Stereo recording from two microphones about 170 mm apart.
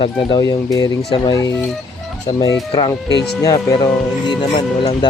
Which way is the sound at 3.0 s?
80° left.